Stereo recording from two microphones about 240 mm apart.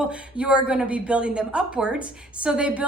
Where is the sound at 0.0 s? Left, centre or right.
Centre.